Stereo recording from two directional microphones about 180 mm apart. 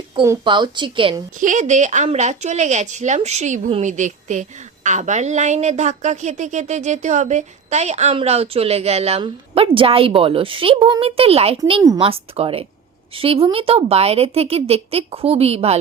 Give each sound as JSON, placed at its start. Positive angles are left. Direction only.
{"t": 0.2, "sound": "a woman's voice", "side_deg": -25}
{"t": 1.4, "sound": "a woman's voice", "side_deg": -45}